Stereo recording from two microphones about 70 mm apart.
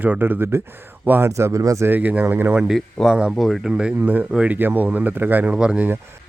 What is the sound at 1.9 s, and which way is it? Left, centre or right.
Speech, right.